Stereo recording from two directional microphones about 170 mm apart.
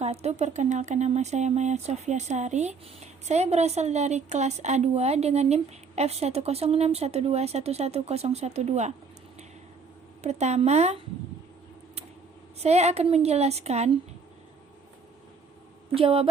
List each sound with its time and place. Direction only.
0.0 s speech: 40° right (ahead or behind)
10.2 s speech: 40° right (ahead or behind)
12.5 s speech: 40° right (ahead or behind)
16.0 s speech: 30° right (ahead or behind)